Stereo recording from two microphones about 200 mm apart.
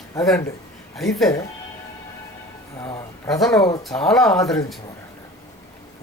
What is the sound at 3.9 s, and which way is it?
Speech, 5° left (ahead or behind).